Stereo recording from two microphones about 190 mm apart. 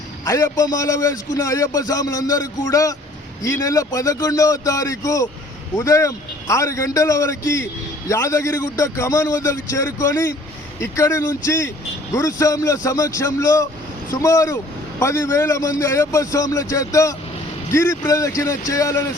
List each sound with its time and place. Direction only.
0.3 s a man's voice: 20° left (ahead or behind)